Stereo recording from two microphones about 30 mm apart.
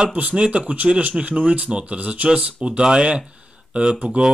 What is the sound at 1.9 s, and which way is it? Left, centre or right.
Speech, right.